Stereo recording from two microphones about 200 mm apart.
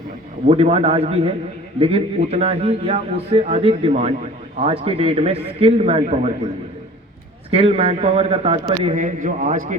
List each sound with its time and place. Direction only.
0.4 s a man's voice: 30° right (ahead or behind)
7.5 s a man's voice: 30° right (ahead or behind)